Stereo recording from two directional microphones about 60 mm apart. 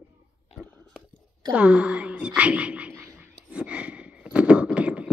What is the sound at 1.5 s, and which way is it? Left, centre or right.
Speech, centre.